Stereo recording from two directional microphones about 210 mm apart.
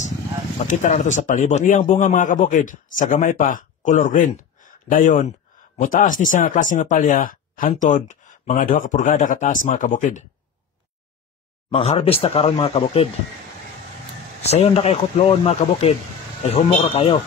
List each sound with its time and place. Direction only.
0.7 s speech: 35° left (ahead or behind)
11.7 s speech: 30° left (ahead or behind)
14.4 s speech: 30° left (ahead or behind)